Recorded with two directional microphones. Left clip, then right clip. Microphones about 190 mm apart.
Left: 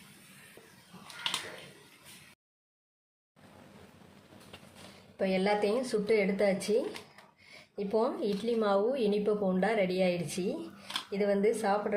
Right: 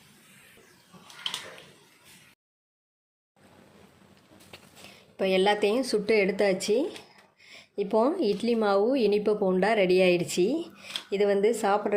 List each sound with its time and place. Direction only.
5.1 s speech: 45° right (ahead or behind)